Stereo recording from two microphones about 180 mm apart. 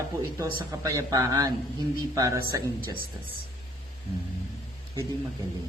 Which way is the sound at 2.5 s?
20° right (ahead or behind).